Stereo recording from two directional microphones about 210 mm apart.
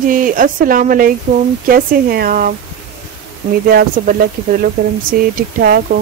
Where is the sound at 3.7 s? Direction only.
45° right (ahead or behind).